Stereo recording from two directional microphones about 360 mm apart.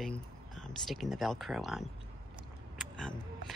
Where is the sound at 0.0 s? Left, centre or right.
Centre.